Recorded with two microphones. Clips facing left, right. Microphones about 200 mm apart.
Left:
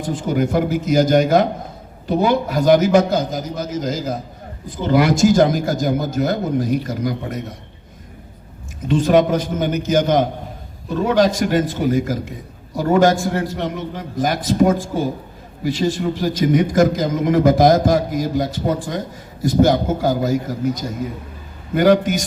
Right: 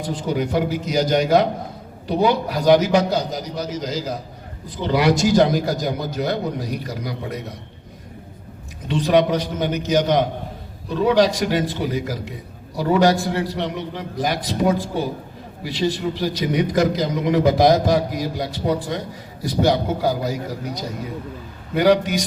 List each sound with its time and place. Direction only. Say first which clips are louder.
0.0 s a man's voice: left 3 dB; 50° left (ahead or behind)
8.9 s a man's voice: left 3 dB; 50° left (ahead or behind)